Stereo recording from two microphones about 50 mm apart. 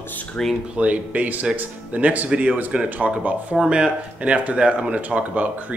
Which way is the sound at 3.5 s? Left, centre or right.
Centre.